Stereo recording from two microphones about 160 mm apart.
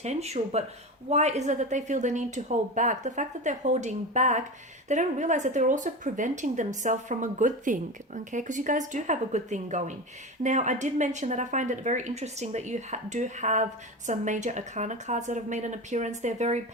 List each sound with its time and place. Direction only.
0.0 s speech: 45° right (ahead or behind)